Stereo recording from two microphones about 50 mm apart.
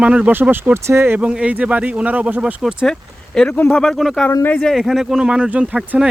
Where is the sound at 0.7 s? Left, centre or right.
Right.